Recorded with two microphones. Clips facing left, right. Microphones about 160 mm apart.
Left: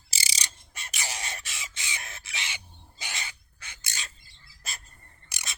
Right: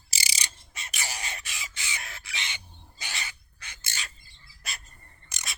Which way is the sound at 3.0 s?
20° left (ahead or behind).